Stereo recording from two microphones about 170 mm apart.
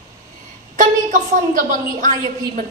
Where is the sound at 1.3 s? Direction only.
50° right (ahead or behind).